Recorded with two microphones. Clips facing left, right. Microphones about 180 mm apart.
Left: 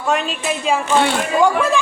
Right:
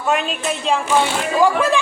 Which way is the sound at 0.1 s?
Centre (ahead or behind).